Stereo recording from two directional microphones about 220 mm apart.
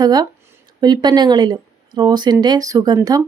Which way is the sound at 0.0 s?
15° right (ahead or behind).